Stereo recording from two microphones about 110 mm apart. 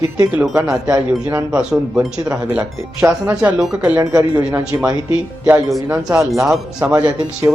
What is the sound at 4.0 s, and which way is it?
Speech, 35° right (ahead or behind).